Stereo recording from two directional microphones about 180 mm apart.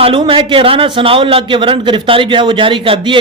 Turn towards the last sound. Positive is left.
turn(degrees=-30)  # may be behind; listen again after turning